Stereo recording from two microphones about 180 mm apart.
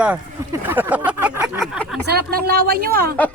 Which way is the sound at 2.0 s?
60° right (ahead or behind).